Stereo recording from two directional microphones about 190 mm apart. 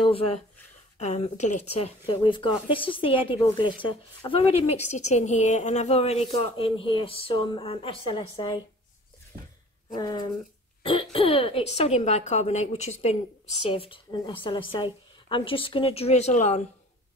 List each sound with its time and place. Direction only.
0.0 s speech: 30° left (ahead or behind)
9.9 s speech: 20° left (ahead or behind)
10.8 s cough: 25° left (ahead or behind)
11.1 s a woman's voice: 30° left (ahead or behind)